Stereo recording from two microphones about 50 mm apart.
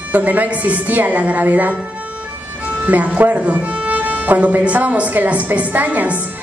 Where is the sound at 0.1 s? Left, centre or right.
Right.